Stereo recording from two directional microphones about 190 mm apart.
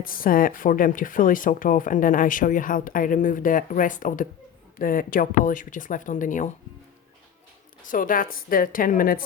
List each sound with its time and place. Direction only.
0.0 s speech: 50° left (ahead or behind)
7.9 s speech: 45° left (ahead or behind)